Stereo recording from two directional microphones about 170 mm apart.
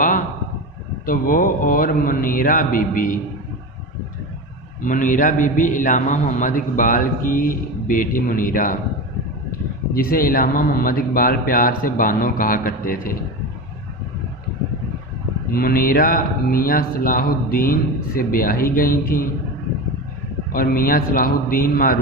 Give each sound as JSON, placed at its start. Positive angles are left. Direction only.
{"t": 1.0, "sound": "a man's voice", "side_deg": 55}
{"t": 4.8, "sound": "a man's voice", "side_deg": 50}
{"t": 9.9, "sound": "speech", "side_deg": 60}
{"t": 15.5, "sound": "speech", "side_deg": 60}
{"t": 20.5, "sound": "speech", "side_deg": 60}